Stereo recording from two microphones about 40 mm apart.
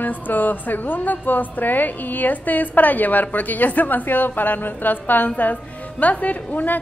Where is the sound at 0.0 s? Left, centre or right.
Left.